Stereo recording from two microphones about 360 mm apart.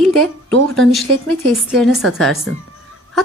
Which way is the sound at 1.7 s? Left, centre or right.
Centre.